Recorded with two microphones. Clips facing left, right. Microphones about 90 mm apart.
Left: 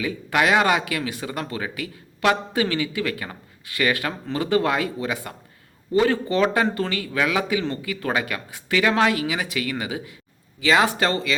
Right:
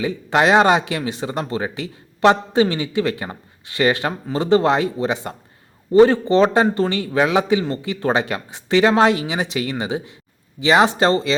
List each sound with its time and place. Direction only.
0.0 s speech: 25° right (ahead or behind)